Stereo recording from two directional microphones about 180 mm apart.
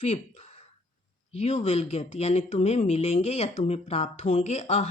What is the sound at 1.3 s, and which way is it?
Speech, 35° left (ahead or behind).